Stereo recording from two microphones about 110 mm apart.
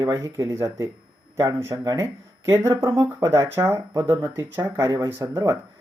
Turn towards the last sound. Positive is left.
turn(degrees=-25)  # may be behind; listen again after turning